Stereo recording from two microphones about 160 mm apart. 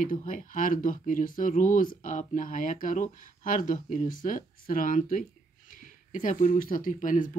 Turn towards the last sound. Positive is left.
turn(degrees=55)  # may be behind; listen again after turning